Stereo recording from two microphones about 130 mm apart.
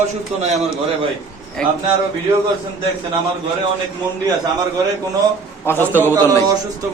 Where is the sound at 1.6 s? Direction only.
5° left (ahead or behind).